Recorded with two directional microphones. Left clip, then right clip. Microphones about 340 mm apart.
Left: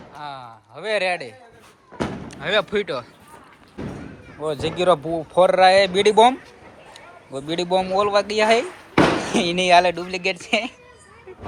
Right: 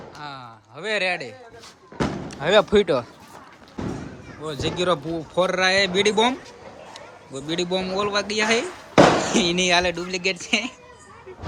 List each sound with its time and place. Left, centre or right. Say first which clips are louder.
0.2 s a sound: left 4 dB; centre
2.3 s speech: right 4 dB; centre
4.4 s speech: left 4 dB; centre
7.3 s speech: left 4 dB; centre